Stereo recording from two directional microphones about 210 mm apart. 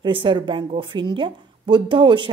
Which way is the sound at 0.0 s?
25° right (ahead or behind).